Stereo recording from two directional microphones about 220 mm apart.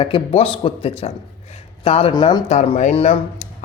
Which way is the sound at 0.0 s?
25° left (ahead or behind).